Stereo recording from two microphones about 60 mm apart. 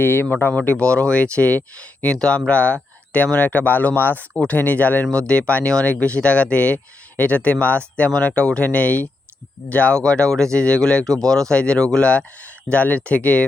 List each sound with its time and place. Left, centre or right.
0.0 s speech: left
2.1 s speech: centre; by 5.0 s left
5.1 s speech: centre